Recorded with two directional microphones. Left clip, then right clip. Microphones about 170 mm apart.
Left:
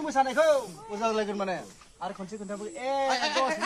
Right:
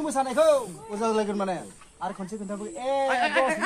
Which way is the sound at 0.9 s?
10° left (ahead or behind).